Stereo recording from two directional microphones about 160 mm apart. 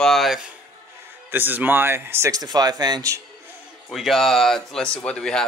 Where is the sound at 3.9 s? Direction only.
Centre (ahead or behind).